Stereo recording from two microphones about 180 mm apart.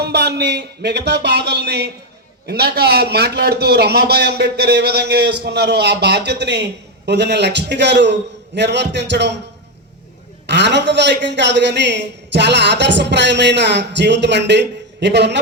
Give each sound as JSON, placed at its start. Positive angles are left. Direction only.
{"t": 0.0, "sound": "a man's voice", "side_deg": -65}
{"t": 10.4, "sound": "a man's voice", "side_deg": -75}